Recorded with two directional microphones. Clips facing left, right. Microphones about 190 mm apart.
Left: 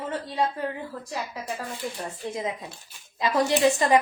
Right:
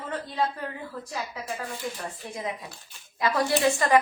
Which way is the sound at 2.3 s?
25° left (ahead or behind).